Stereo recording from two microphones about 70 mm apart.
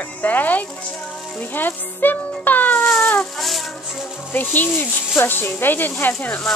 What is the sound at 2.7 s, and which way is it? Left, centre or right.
Cat, centre.